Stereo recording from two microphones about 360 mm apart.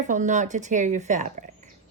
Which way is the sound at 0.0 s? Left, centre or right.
Right.